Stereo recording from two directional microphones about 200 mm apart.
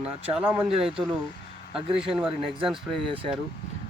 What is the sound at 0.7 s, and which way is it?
Speech, 30° right (ahead or behind).